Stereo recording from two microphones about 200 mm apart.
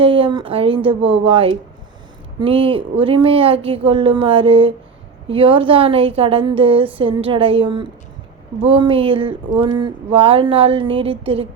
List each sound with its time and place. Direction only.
0.0 s speech: 25° right (ahead or behind)